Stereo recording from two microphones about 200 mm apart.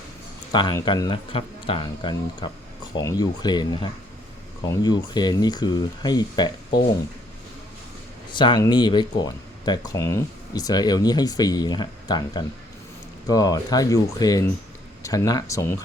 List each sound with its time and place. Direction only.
0.5 s speech: 20° left (ahead or behind)
8.3 s speech: 25° left (ahead or behind)